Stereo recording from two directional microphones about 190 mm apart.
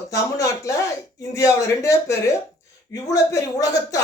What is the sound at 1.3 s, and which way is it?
Speech, 15° left (ahead or behind).